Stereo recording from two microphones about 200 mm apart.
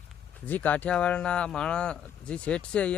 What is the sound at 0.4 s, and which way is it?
Speech, 10° left (ahead or behind).